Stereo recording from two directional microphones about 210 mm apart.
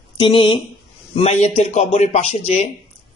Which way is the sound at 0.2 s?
25° left (ahead or behind).